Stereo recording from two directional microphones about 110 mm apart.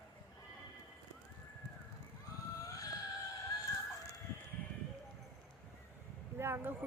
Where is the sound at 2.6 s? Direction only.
30° left (ahead or behind).